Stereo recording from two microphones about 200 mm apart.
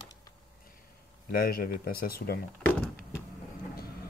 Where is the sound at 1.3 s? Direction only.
45° left (ahead or behind).